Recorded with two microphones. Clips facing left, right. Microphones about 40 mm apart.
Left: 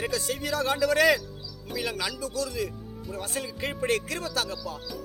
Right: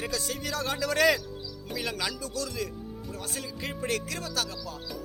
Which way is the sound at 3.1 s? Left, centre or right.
Left.